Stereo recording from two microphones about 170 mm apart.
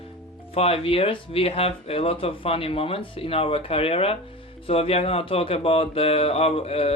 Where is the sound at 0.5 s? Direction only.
35° left (ahead or behind).